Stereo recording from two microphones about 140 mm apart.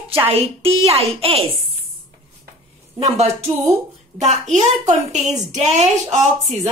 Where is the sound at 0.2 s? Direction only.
45° right (ahead or behind).